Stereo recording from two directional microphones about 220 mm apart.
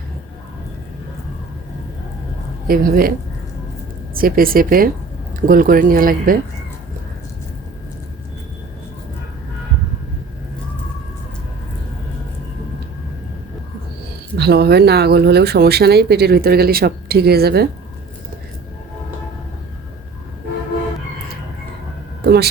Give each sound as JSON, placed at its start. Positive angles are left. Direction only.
{"t": 2.6, "sound": "speech", "side_deg": -40}
{"t": 4.1, "sound": "speech", "side_deg": -40}
{"t": 14.3, "sound": "speech", "side_deg": -50}
{"t": 22.2, "sound": "a sound", "side_deg": -45}